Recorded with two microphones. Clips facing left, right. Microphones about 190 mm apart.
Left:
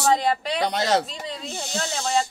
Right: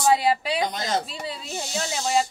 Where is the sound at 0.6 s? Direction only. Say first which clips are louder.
Left 4 dB; 70° left (ahead or behind).